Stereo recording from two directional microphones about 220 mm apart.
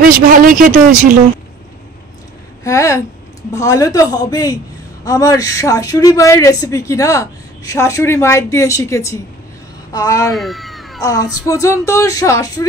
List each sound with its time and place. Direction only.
0.0 s speech: 40° right (ahead or behind)
2.6 s a sound: 15° left (ahead or behind)
3.5 s a woman's voice: 15° left (ahead or behind)
10.3 s cat: centre (ahead or behind)
11.0 s a woman's voice: 15° left (ahead or behind)